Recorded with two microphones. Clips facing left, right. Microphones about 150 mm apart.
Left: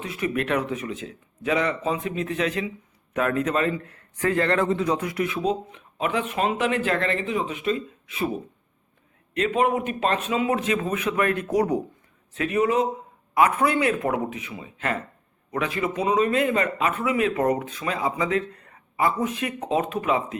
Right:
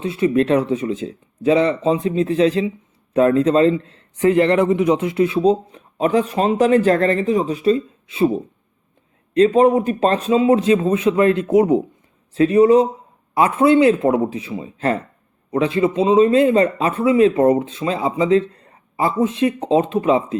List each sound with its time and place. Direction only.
0.0 s a man's voice: 30° right (ahead or behind)